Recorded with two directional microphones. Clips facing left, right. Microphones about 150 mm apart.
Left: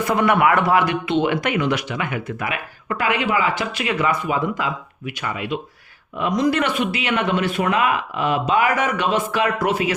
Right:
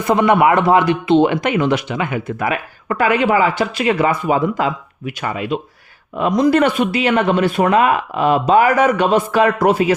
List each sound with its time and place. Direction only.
0.1 s a man's voice: 25° right (ahead or behind)